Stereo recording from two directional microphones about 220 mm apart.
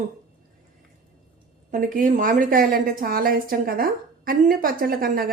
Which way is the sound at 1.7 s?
35° right (ahead or behind).